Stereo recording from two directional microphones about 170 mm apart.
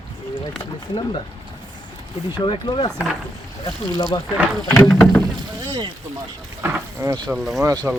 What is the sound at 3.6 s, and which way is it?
Speech, 25° left (ahead or behind).